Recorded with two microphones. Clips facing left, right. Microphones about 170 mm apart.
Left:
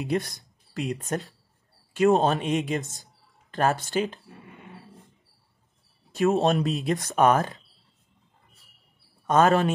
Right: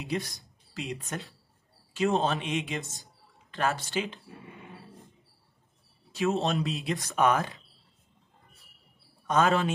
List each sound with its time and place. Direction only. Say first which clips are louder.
0.0 s speech: left 6 dB; 50° left (ahead or behind)
0.7 s speech: left 7 dB; 40° left (ahead or behind)
6.1 s speech: left 6 dB; 45° left (ahead or behind)
9.3 s speech: left 5 dB; 50° left (ahead or behind)